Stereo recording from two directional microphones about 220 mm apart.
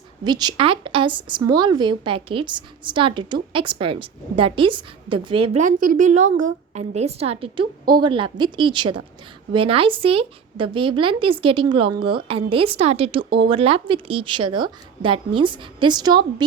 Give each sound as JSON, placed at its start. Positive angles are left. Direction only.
{"t": 0.3, "sound": "a woman's voice", "side_deg": -20}
{"t": 5.6, "sound": "a woman's voice", "side_deg": -35}